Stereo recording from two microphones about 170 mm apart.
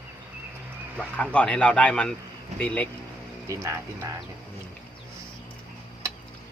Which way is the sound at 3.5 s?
15° right (ahead or behind).